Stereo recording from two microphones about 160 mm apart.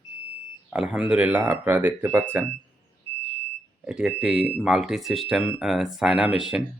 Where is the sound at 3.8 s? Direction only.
5° right (ahead or behind).